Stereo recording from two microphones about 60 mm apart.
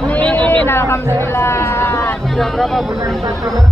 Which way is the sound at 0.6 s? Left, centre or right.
Left.